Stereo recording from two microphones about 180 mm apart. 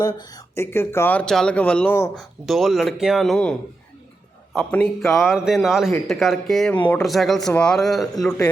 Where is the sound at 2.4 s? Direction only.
Centre (ahead or behind).